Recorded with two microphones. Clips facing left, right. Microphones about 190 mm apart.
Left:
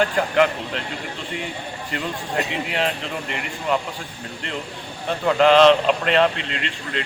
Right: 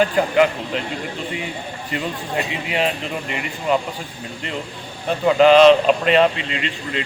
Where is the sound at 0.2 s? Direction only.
5° right (ahead or behind).